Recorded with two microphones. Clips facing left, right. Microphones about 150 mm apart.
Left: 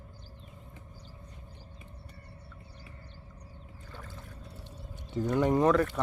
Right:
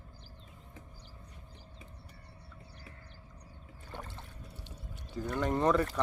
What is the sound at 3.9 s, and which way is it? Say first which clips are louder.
Boat: right 3 dB; 25° right (ahead or behind).